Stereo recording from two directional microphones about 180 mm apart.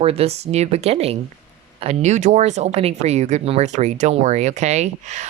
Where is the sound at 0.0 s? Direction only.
35° right (ahead or behind).